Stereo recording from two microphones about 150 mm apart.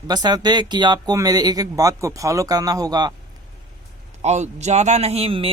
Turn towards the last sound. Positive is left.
turn(degrees=-40)  # may be behind; listen again after turning